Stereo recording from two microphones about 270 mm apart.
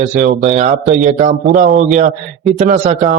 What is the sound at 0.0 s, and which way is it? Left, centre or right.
A man's voice, right.